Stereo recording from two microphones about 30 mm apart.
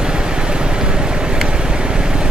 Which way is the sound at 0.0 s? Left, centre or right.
Right.